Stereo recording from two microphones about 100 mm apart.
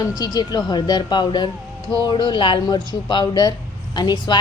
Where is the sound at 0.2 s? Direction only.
40° left (ahead or behind).